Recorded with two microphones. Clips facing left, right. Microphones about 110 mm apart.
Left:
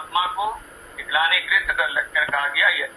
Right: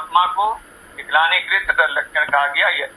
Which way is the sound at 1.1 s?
55° right (ahead or behind).